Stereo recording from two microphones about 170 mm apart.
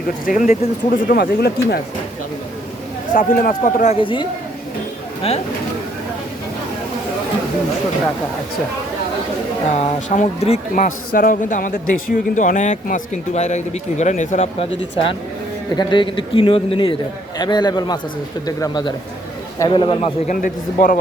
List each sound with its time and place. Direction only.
0.3 s speech: 50° left (ahead or behind)
3.2 s a man's voice: 55° left (ahead or behind)
4.0 s a man's voice: 30° left (ahead or behind)
9.7 s speech: 45° left (ahead or behind)
10.8 s a man's voice: 55° left (ahead or behind)
15.7 s a man's voice: 25° left (ahead or behind)
20.2 s speech: 55° left (ahead or behind)